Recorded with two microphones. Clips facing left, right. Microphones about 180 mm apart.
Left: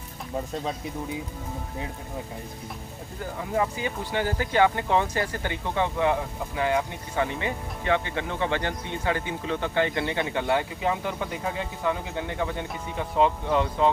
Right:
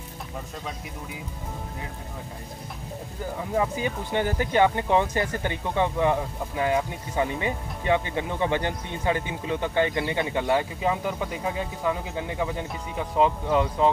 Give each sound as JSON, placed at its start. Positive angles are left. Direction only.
{"t": 4.1, "sound": "speech", "side_deg": -20}